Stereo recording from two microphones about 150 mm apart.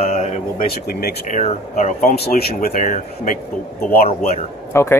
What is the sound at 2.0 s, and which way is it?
Speech, 90° left.